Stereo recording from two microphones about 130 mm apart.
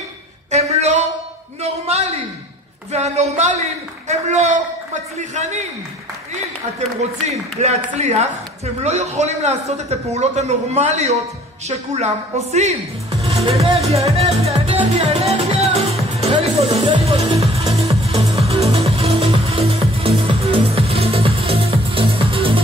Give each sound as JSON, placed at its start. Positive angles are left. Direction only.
{"t": 0.5, "sound": "a sound", "side_deg": -55}
{"t": 2.9, "sound": "a man's voice", "side_deg": -55}
{"t": 7.2, "sound": "a man's voice", "side_deg": -55}
{"t": 16.2, "sound": "music", "side_deg": -50}